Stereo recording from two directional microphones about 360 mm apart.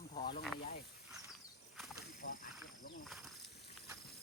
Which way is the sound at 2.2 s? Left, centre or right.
Left.